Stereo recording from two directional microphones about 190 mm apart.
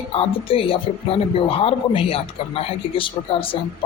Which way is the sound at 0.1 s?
30° left (ahead or behind).